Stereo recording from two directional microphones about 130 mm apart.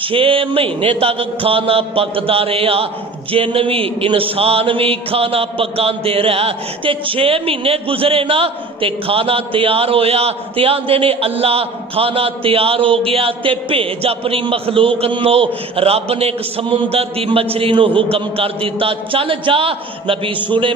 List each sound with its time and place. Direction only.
0.1 s speech: 45° right (ahead or behind)